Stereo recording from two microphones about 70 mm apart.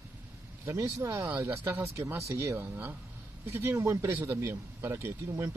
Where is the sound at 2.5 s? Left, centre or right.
Right.